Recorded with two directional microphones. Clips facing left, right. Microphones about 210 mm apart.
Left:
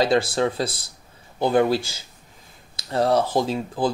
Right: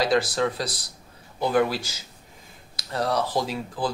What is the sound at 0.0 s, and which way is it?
Speech, 25° left (ahead or behind).